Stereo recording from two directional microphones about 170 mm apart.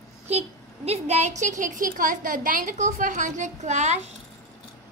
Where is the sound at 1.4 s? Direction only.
50° right (ahead or behind).